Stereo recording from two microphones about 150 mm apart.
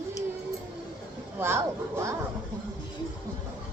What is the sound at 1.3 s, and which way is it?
Speech, 15° right (ahead or behind).